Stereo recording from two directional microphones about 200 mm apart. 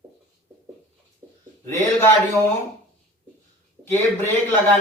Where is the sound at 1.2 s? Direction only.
10° right (ahead or behind).